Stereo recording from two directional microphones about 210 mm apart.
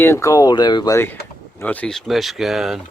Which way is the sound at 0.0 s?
15° left (ahead or behind).